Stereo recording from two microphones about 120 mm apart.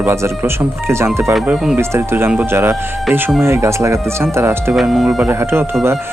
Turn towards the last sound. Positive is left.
turn(degrees=-20)  # may be behind; listen again after turning